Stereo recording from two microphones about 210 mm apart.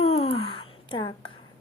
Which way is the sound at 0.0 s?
30° left (ahead or behind).